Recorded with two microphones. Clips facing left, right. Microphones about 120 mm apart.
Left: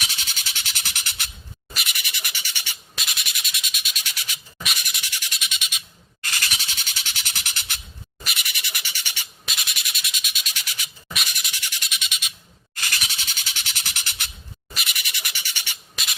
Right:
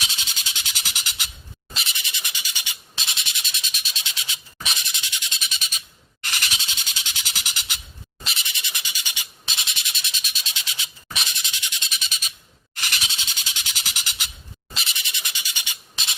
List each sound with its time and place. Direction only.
0.5 s bird: 15° right (ahead or behind)
1.7 s insect: 25° right (ahead or behind)
3.0 s a sound: 25° right (ahead or behind)
5.4 s bird: 35° right (ahead or behind)
6.2 s a sound: 20° right (ahead or behind)
7.0 s bird: 15° right (ahead or behind)
8.2 s insect: 25° right (ahead or behind)
10.5 s insect: 25° right (ahead or behind)
11.9 s frog: 35° right (ahead or behind)
12.8 s a sound: 20° right (ahead or behind)
14.7 s insect: 25° right (ahead or behind)